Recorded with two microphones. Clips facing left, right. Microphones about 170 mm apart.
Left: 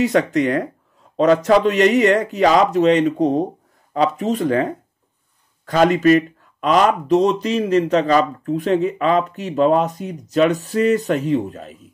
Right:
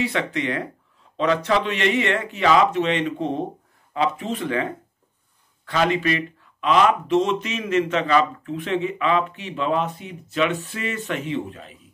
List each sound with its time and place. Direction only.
0.0 s speech: 45° left (ahead or behind)